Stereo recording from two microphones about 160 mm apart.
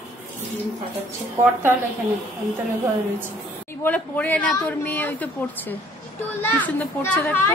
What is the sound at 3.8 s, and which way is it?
A child's voice, 10° left (ahead or behind).